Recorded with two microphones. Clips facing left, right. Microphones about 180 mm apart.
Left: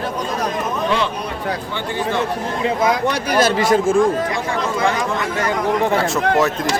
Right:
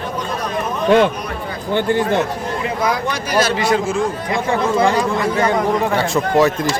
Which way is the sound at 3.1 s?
55° left (ahead or behind).